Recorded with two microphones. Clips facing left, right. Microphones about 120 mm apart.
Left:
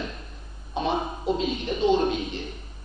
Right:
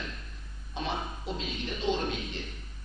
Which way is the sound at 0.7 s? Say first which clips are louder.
Left 8 dB; 15° left (ahead or behind).